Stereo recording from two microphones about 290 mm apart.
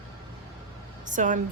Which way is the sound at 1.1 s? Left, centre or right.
Right.